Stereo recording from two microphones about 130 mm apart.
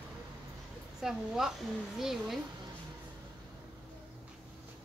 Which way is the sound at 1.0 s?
5° right (ahead or behind).